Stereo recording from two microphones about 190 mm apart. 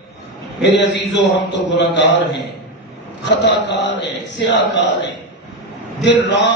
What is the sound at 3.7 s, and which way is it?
Speech, 65° left (ahead or behind).